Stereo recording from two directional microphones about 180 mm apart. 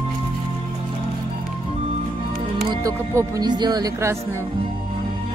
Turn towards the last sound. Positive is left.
turn(degrees=-20)  # may be behind; listen again after turning